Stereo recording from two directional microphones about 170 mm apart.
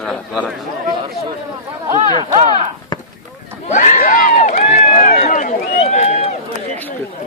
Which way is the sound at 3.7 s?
45° left (ahead or behind).